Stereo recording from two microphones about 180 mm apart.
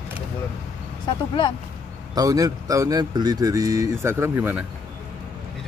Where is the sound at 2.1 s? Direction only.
20° right (ahead or behind).